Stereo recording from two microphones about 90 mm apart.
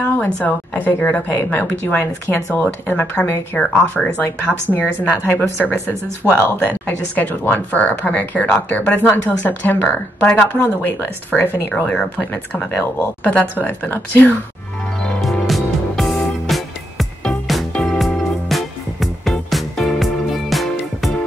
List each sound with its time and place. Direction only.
0.0 s speech: 15° left (ahead or behind)
5.2 s speech: 25° left (ahead or behind)
15.2 s music: centre (ahead or behind)